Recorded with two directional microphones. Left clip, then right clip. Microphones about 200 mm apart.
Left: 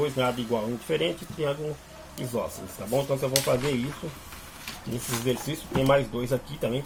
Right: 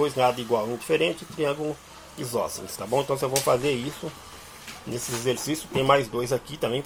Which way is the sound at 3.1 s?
25° right (ahead or behind).